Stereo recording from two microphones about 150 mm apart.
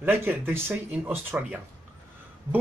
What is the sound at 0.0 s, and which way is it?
Speech, 15° right (ahead or behind).